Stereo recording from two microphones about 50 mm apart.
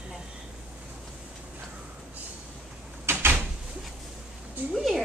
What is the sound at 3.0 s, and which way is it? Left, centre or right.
Door, right.